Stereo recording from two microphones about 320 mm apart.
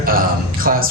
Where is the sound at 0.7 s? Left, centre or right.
Right.